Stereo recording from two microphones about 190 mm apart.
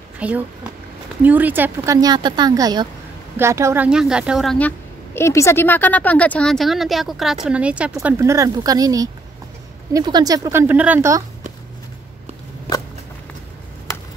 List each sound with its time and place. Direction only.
0.2 s a woman's voice: 5° right (ahead or behind)